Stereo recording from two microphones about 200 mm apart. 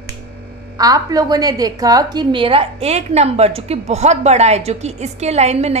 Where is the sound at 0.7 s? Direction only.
20° right (ahead or behind).